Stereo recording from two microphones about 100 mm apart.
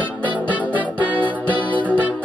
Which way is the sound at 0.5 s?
15° right (ahead or behind).